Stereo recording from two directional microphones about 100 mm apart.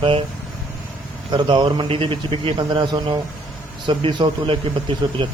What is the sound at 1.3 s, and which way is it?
A man's voice, 50° right (ahead or behind).